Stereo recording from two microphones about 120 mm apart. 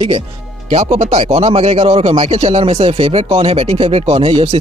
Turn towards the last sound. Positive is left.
turn(degrees=-55)  # may be behind; listen again after turning